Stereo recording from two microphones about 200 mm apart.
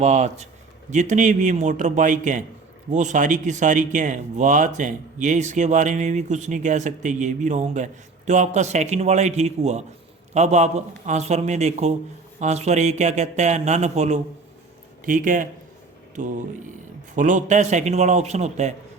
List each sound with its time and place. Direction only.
0.0 s speech: 35° right (ahead or behind)